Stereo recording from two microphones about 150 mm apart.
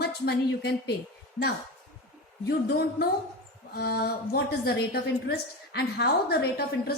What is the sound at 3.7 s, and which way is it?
A woman's voice, 90° left.